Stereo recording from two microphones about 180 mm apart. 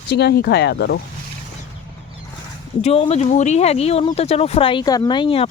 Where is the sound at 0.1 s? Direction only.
65° left (ahead or behind).